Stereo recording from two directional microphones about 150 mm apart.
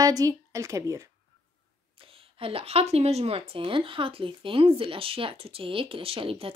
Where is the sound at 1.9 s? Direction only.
35° right (ahead or behind).